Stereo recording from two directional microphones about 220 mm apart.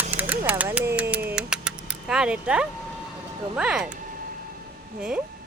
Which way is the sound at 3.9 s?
40° right (ahead or behind).